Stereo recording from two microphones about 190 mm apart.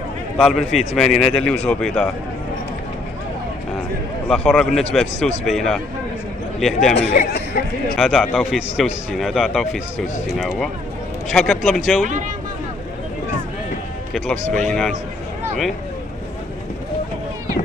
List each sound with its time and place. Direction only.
0.4 s a man's voice: centre (ahead or behind)
4.3 s a man's voice: centre (ahead or behind)
7.0 s speech: 35° left (ahead or behind)
7.5 s a sound: 50° left (ahead or behind)
7.9 s a man's voice: centre (ahead or behind)
11.2 s a man's voice: centre (ahead or behind)
14.1 s a man's voice: 5° left (ahead or behind)